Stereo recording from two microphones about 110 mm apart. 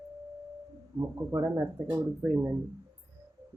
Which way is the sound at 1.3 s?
25° right (ahead or behind).